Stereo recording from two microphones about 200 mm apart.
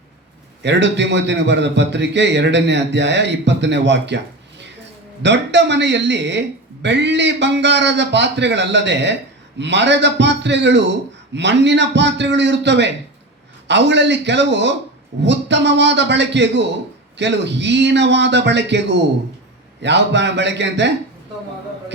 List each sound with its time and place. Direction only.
0.6 s a man's voice: 60° right (ahead or behind)
5.2 s a man's voice: 60° right (ahead or behind)